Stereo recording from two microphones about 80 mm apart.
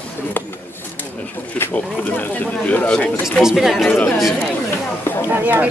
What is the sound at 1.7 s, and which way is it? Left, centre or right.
Speech, centre.